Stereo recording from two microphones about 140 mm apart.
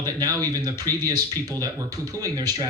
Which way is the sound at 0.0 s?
25° right (ahead or behind).